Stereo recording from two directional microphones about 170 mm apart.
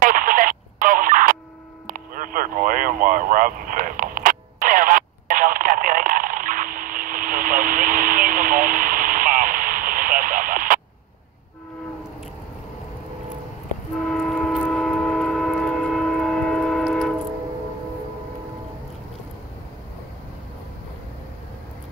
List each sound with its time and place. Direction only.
0.0 s radio: 50° right (ahead or behind)
13.9 s train: 5° left (ahead or behind)